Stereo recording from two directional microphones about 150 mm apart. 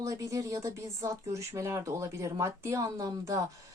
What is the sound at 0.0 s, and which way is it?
Speech, 20° right (ahead or behind).